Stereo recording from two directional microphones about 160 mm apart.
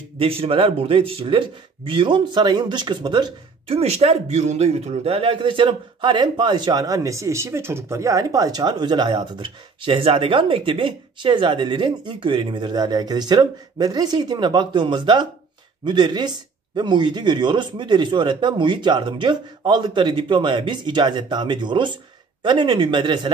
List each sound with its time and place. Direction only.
0.2 s speech: 35° right (ahead or behind)